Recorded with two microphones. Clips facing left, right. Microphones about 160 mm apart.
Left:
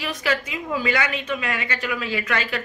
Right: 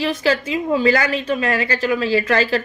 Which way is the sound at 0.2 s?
30° right (ahead or behind).